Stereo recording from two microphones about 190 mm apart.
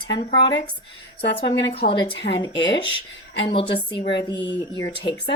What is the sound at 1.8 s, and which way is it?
Speech, 55° left (ahead or behind).